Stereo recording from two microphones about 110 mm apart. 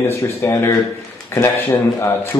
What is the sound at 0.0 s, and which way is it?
Speech, 20° left (ahead or behind).